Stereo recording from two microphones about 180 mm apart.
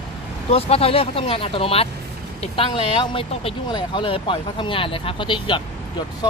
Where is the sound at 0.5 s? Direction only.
35° left (ahead or behind).